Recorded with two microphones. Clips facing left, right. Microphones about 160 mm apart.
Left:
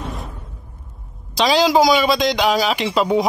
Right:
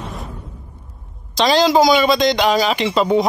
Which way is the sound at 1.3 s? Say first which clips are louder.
Right 1 dB; 5° left (ahead or behind).